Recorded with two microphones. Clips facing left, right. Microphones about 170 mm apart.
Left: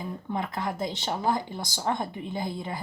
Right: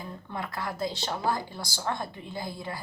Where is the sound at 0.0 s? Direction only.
20° left (ahead or behind).